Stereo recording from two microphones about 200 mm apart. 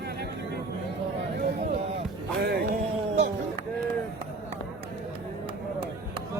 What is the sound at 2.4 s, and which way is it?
Speech, 55° right (ahead or behind).